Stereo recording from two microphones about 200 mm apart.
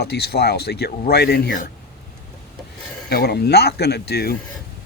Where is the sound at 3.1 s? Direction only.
55° left (ahead or behind).